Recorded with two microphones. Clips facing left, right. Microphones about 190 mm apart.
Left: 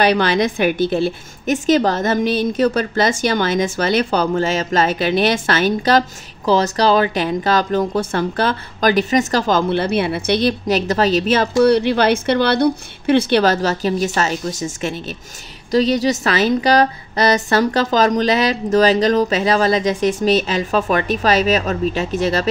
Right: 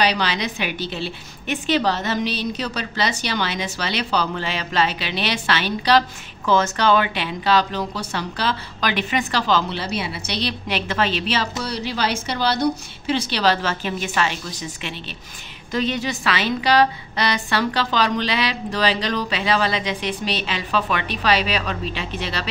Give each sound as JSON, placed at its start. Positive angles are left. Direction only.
{"t": 0.0, "sound": "a woman's voice", "side_deg": 50}